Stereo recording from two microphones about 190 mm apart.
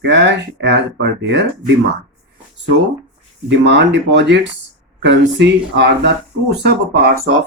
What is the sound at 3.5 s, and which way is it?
Speech, 65° right (ahead or behind).